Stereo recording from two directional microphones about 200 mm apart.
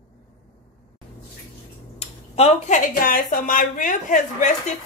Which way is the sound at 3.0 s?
45° left (ahead or behind).